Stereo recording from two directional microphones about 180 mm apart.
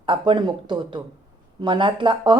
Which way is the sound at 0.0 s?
25° right (ahead or behind).